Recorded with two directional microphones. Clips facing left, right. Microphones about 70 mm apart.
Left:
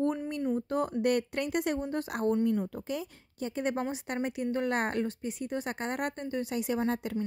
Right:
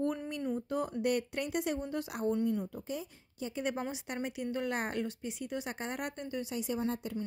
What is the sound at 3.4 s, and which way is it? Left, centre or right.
Speech, left.